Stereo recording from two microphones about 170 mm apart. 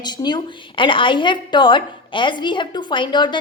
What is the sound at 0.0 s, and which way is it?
A woman's voice, 25° left (ahead or behind).